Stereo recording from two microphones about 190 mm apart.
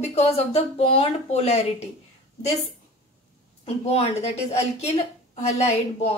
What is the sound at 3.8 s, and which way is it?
Speech, 35° left (ahead or behind).